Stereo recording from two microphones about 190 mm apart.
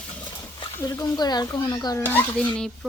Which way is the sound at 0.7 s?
15° left (ahead or behind).